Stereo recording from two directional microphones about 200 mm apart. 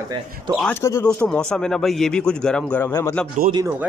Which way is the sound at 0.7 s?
15° left (ahead or behind).